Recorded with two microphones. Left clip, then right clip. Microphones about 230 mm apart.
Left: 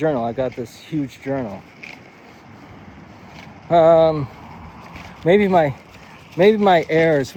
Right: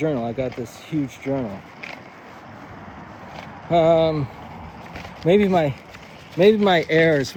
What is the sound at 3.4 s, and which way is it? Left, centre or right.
Speech, centre.